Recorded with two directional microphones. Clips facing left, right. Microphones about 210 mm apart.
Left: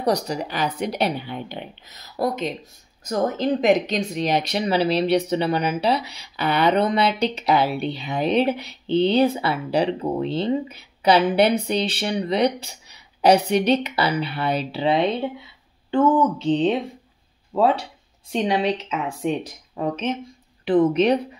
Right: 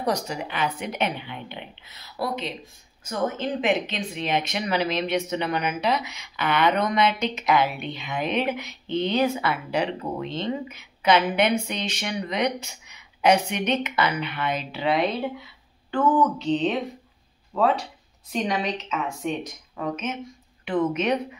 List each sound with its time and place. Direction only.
0.0 s speech: 35° left (ahead or behind)